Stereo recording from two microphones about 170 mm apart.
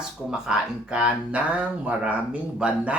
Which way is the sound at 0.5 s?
5° right (ahead or behind).